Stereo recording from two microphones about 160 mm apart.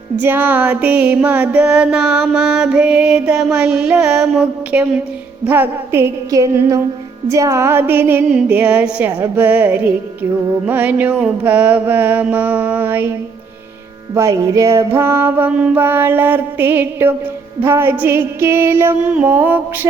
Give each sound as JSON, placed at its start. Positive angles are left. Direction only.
{"t": 0.2, "sound": "music", "side_deg": -10}